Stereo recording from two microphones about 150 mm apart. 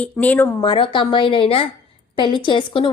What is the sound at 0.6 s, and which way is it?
A woman's voice, 35° left (ahead or behind).